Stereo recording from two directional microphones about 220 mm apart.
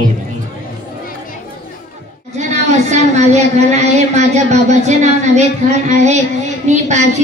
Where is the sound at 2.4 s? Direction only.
30° right (ahead or behind).